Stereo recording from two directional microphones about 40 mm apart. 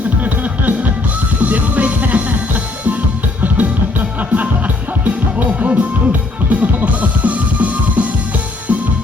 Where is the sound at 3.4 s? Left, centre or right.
Right.